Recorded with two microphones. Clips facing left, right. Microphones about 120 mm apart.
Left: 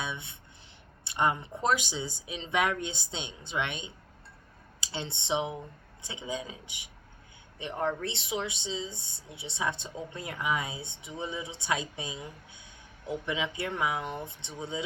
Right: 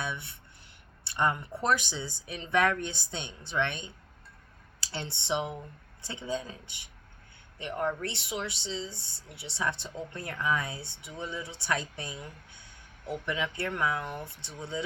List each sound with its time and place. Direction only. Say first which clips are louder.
0.0 s speech: right 1 dB; 20° left (ahead or behind)
4.8 s speech: left 1 dB; 20° left (ahead or behind)